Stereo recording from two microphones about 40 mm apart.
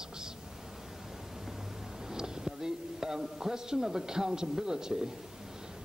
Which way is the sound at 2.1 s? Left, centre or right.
Centre.